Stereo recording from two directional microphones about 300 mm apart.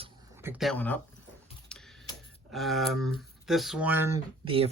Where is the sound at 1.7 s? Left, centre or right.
Centre.